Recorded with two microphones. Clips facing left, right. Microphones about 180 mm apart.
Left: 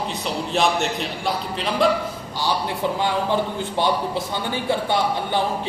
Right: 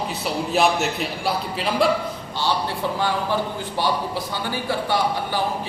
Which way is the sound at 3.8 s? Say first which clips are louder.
Left 2 dB; 20° left (ahead or behind).